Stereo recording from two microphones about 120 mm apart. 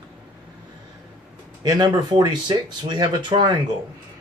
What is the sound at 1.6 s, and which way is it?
Speech, 35° right (ahead or behind).